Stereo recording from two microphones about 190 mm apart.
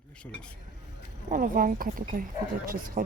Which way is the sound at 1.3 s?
45° right (ahead or behind).